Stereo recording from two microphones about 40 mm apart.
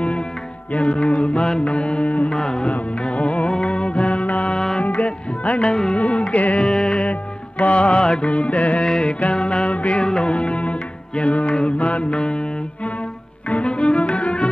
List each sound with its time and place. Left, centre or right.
0.7 s mantra: left
2.3 s mantra: centre
3.0 s music: left
5.7 s mantra: left
5.9 s music: left
6.6 s music: left
8.8 s music: centre
13.5 s cello: left